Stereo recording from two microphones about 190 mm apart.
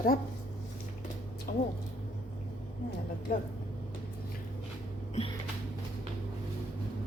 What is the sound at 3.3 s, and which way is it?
Speech, 55° left (ahead or behind).